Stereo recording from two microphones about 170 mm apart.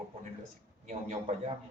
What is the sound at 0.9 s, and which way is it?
Speech, 45° right (ahead or behind).